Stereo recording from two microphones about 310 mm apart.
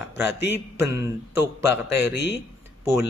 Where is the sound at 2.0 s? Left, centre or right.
Left.